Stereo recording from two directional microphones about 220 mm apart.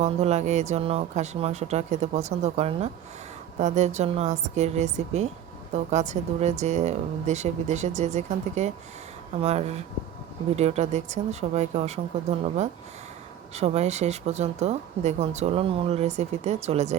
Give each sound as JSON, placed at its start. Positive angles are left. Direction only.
{"t": 0.0, "sound": "a woman's voice", "side_deg": -30}